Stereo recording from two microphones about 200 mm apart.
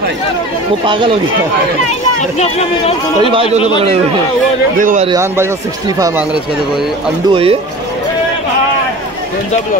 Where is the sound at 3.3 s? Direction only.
30° right (ahead or behind).